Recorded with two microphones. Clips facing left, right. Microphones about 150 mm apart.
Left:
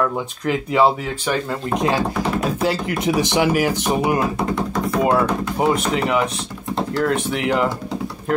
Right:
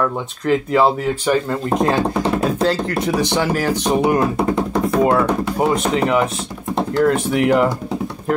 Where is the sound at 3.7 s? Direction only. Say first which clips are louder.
Right 3 dB; 20° right (ahead or behind).